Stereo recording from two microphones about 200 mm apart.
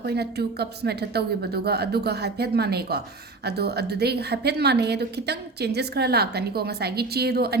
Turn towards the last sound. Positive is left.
turn(degrees=-55)  # may be behind; listen again after turning